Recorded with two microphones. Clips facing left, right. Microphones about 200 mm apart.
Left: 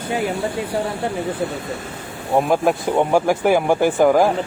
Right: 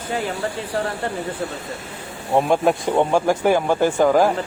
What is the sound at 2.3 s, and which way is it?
Speech, 5° left (ahead or behind).